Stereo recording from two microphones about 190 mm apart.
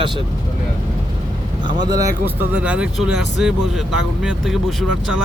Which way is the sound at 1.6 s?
20° right (ahead or behind).